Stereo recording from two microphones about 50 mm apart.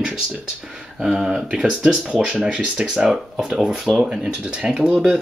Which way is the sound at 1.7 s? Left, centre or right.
Right.